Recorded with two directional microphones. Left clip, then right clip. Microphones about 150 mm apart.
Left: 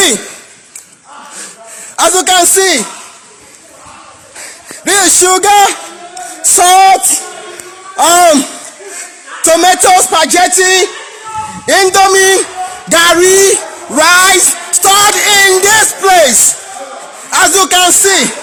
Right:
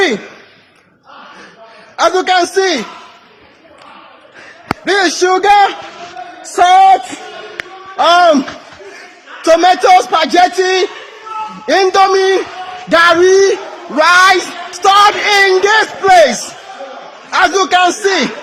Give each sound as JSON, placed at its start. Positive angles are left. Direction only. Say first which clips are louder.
{"t": 2.0, "sound": "speech", "louder": "left 2 dB", "side_deg": 30}
{"t": 4.9, "sound": "a man's voice", "louder": "left 3 dB", "side_deg": 30}
{"t": 7.9, "sound": "speech", "louder": "left 2 dB", "side_deg": 20}
{"t": 9.4, "sound": "a man's voice", "louder": "left 1 dB", "side_deg": 25}
{"t": 17.3, "sound": "a man's voice", "louder": "left 2 dB", "side_deg": 35}